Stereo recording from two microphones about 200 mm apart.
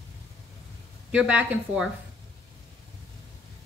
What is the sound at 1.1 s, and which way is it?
Speech, 5° right (ahead or behind).